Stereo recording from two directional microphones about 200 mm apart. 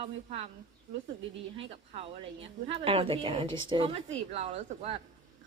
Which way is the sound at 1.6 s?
30° right (ahead or behind).